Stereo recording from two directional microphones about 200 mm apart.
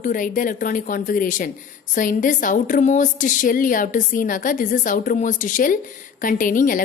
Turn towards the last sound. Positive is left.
turn(degrees=45)  # may be behind; listen again after turning